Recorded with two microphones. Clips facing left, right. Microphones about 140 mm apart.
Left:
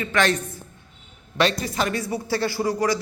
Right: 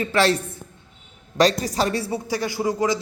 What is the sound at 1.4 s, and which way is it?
Speech, 35° right (ahead or behind).